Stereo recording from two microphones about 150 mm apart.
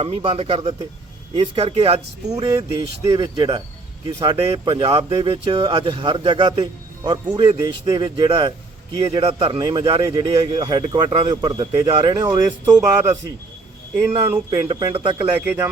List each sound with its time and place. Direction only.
0.0 s a man's voice: 40° right (ahead or behind)
2.7 s a man's voice: 20° right (ahead or behind)
15.4 s speech: 15° right (ahead or behind)